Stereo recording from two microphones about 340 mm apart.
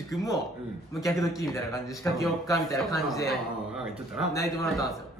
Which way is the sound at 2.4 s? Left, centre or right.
Centre.